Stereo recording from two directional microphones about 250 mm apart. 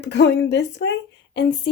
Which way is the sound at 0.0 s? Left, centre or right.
Left.